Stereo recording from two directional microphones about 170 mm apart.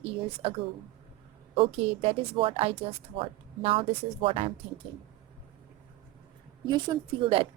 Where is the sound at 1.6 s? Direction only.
35° right (ahead or behind).